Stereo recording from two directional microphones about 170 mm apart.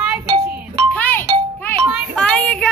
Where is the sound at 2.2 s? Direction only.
5° left (ahead or behind).